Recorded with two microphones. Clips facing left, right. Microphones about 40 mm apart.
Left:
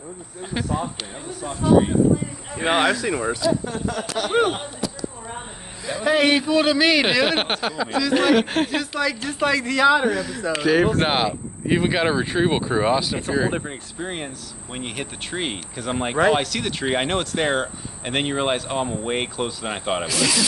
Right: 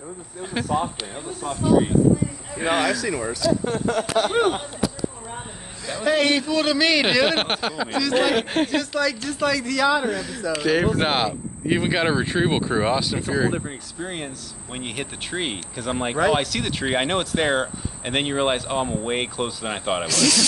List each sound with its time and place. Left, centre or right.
0.4 s speech: centre
2.5 s speech: left
3.6 s speech: right
5.9 s speech: centre; by 10.0 s left
10.0 s speech: centre
20.1 s speech: centre